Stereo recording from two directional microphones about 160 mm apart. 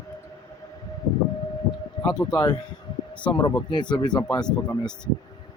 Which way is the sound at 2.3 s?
25° left (ahead or behind).